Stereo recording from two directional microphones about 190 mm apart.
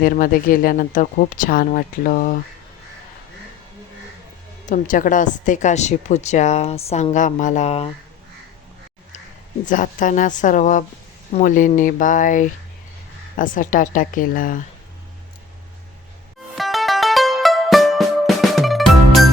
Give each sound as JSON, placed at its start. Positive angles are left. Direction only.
{"t": 0.0, "sound": "speech", "side_deg": 45}
{"t": 4.7, "sound": "a woman's voice", "side_deg": 45}
{"t": 9.6, "sound": "speech", "side_deg": 45}
{"t": 16.6, "sound": "music", "side_deg": 0}